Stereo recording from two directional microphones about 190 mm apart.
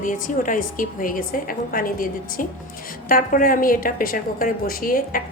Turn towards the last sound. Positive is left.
turn(degrees=50)  # may be behind; listen again after turning